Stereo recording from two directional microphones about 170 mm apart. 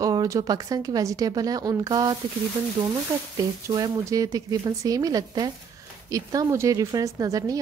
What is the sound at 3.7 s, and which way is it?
Speech, 20° right (ahead or behind).